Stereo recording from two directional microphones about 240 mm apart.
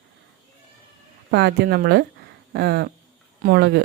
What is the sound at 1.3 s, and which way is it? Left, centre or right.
Speech, right.